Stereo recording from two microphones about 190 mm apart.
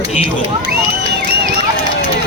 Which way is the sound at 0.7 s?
60° right (ahead or behind).